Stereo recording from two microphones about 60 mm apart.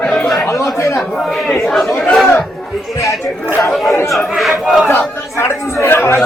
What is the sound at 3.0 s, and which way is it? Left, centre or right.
Speech, left.